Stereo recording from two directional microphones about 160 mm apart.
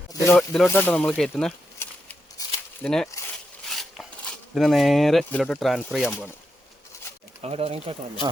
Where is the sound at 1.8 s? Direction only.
15° left (ahead or behind).